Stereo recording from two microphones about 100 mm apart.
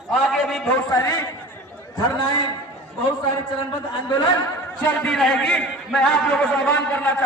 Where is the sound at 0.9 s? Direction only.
35° left (ahead or behind).